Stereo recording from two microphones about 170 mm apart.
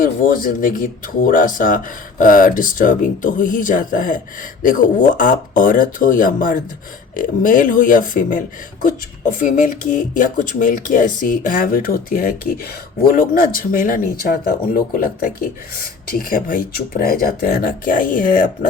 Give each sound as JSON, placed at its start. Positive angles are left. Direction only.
{"t": 0.0, "sound": "speech", "side_deg": 55}